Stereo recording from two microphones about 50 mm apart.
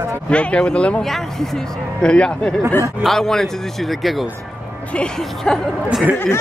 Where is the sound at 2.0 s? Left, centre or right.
Centre.